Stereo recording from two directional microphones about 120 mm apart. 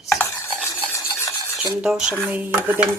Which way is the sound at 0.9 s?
25° left (ahead or behind).